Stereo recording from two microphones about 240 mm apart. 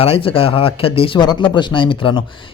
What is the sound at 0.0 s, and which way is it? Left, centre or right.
Speech, left.